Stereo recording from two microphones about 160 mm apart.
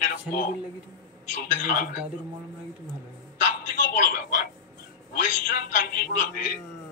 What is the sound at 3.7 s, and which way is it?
Speech, 55° left (ahead or behind).